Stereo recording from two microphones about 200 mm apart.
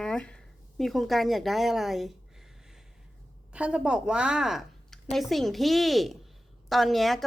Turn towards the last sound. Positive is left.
turn(degrees=0)  # may be behind; listen again after turning